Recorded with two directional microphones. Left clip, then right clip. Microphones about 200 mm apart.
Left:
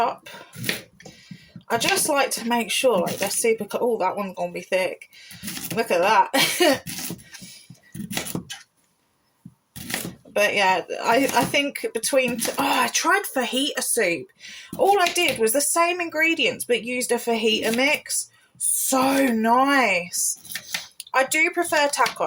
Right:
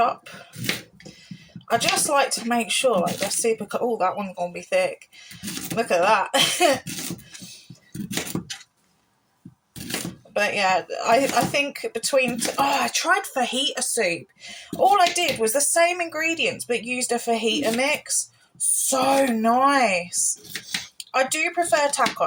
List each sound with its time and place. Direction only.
1.6 s speech: 20° left (ahead or behind)
8.3 s a sound: 15° right (ahead or behind)
10.3 s speech: 25° left (ahead or behind)